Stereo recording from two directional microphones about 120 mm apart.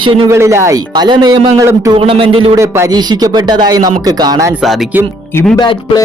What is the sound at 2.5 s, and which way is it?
Speech, 25° right (ahead or behind).